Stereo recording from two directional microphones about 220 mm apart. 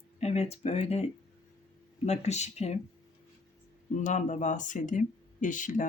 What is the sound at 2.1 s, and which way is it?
Speech, 30° left (ahead or behind).